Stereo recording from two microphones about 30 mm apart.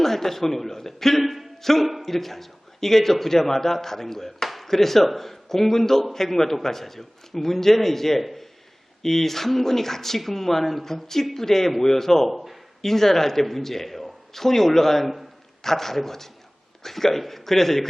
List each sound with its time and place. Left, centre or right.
0.0 s a man's voice: centre
1.2 s speech: centre
1.6 s a man's voice: centre
9.0 s a man's voice: centre
12.3 s a man's voice: centre
12.8 s a man's voice: centre
15.0 s a man's voice: centre
15.6 s a man's voice: centre